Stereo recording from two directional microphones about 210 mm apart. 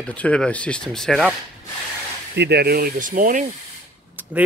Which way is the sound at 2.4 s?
50° right (ahead or behind).